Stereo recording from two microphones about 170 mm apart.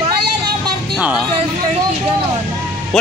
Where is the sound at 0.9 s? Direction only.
5° right (ahead or behind).